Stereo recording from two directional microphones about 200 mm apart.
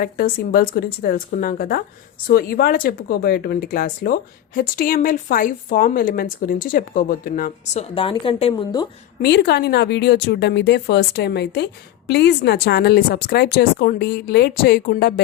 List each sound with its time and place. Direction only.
0.0 s a woman's voice: 45° left (ahead or behind); by 8.9 s 20° left (ahead or behind)
9.2 s speech: 55° left (ahead or behind)